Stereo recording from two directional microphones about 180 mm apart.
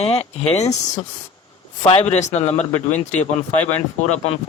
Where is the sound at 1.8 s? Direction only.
30° left (ahead or behind).